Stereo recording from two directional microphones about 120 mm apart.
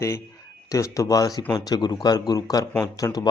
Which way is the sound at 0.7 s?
25° left (ahead or behind).